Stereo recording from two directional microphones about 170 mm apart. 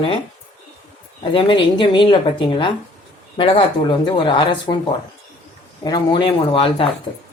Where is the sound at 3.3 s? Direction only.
30° left (ahead or behind).